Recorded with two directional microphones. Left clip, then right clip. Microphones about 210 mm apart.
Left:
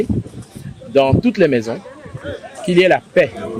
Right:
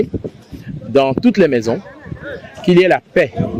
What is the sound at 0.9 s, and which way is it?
Speech, 45° right (ahead or behind).